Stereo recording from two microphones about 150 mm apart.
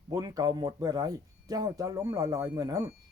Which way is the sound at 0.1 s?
25° right (ahead or behind).